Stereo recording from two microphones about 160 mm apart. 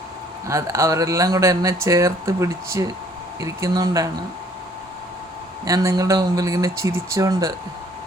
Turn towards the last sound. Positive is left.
turn(degrees=-20)  # may be behind; listen again after turning